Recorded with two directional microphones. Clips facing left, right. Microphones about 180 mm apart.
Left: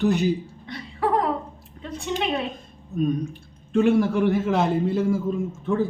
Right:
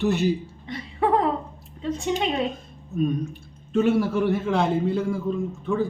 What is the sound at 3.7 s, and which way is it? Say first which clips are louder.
A man's voice: left 2 dB; 5° right (ahead or behind).